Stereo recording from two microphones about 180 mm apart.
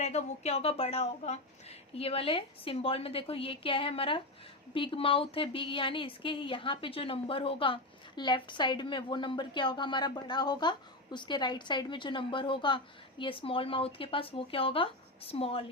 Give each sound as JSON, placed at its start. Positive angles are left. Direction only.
{"t": 0.0, "sound": "a woman's voice", "side_deg": 40}